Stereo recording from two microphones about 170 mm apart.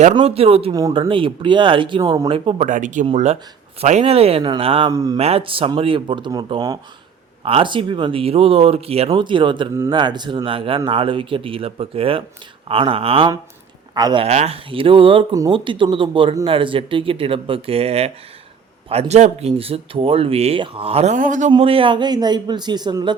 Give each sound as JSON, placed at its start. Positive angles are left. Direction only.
{"t": 0.1, "sound": "speech", "side_deg": -35}
{"t": 0.7, "sound": "speech", "side_deg": -20}
{"t": 2.6, "sound": "speech", "side_deg": -50}
{"t": 4.9, "sound": "speech", "side_deg": -20}
{"t": 5.1, "sound": "speech", "side_deg": -35}
{"t": 14.3, "sound": "speech", "side_deg": -40}
{"t": 21.5, "sound": "speech", "side_deg": -35}